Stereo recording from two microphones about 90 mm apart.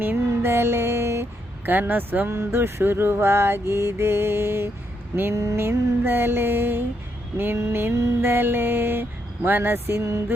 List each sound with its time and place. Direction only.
0.0 s mantra: 25° right (ahead or behind)